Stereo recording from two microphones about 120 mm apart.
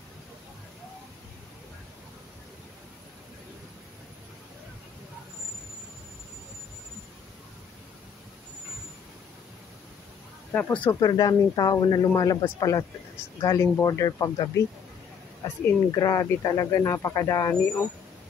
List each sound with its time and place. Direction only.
10.5 s speech: 15° left (ahead or behind)
10.9 s speech: 35° left (ahead or behind)
15.9 s speech: 35° left (ahead or behind)